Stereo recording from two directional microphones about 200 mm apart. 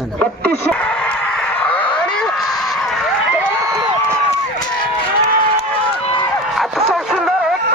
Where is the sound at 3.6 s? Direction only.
20° right (ahead or behind).